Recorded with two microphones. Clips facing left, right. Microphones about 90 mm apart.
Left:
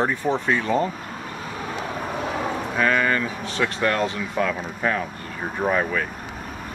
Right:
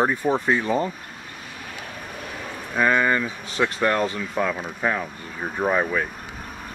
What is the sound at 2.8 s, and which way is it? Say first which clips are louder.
Speech: right 2 dB; 15° right (ahead or behind).